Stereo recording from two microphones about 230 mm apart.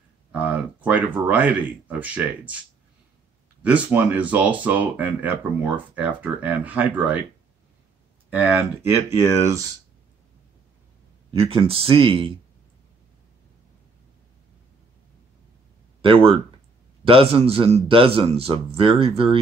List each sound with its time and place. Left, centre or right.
0.3 s a sound: centre
0.8 s speech: centre
3.6 s speech: centre
8.3 s speech: centre
11.3 s a man's voice: right
16.0 s a man's voice: right